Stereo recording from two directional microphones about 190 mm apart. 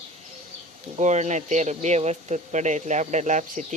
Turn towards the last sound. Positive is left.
turn(degrees=-40)  # may be behind; listen again after turning